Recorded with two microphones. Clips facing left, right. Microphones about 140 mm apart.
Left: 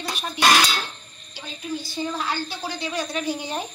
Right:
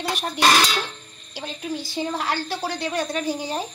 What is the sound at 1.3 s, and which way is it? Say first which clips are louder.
A woman's voice: right 2 dB; 80° right.